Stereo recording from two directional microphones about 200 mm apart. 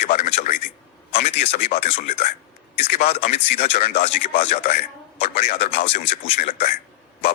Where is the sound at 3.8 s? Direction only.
50° left (ahead or behind).